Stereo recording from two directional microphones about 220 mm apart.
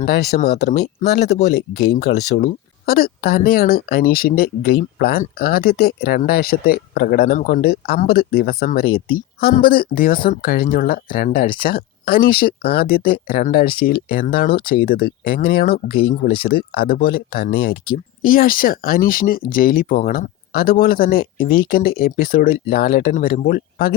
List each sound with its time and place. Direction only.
0.0 s speech: 45° left (ahead or behind)